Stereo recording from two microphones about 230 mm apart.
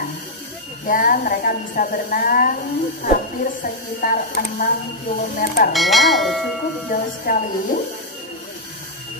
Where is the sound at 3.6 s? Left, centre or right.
Left.